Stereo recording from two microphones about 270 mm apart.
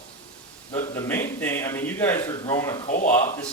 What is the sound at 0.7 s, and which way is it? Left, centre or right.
Speech, centre.